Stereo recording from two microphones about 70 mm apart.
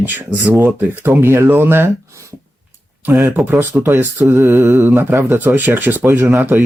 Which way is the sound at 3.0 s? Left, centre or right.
Right.